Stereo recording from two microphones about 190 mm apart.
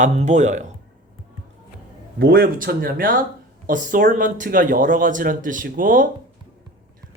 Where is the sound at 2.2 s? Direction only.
55° right (ahead or behind).